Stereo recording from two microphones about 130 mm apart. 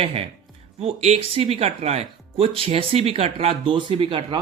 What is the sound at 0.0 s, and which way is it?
Speech, 50° right (ahead or behind).